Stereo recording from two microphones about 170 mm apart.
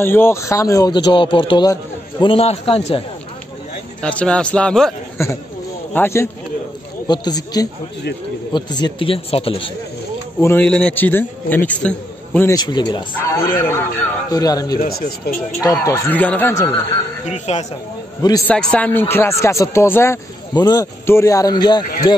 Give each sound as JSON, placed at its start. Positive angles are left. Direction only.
{"t": 0.0, "sound": "a man's voice", "side_deg": 15}
{"t": 2.3, "sound": "speech", "side_deg": 35}
{"t": 4.0, "sound": "speech", "side_deg": 5}
{"t": 5.1, "sound": "a man's voice", "side_deg": 15}
{"t": 10.4, "sound": "speech", "side_deg": 10}
{"t": 12.4, "sound": "a man's voice", "side_deg": 25}
{"t": 13.6, "sound": "a man's voice", "side_deg": 15}
{"t": 14.8, "sound": "speech", "side_deg": 65}
{"t": 15.6, "sound": "speech", "side_deg": 20}
{"t": 17.3, "sound": "speech", "side_deg": 40}
{"t": 18.5, "sound": "a man's voice", "side_deg": 5}